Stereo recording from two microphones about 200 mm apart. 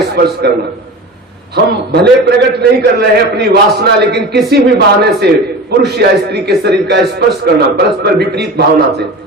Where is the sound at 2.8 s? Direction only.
55° right (ahead or behind).